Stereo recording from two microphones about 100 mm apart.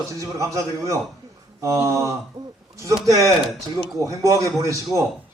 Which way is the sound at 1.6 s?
30° right (ahead or behind).